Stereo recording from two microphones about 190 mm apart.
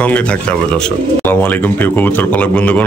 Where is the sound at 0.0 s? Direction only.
5° left (ahead or behind).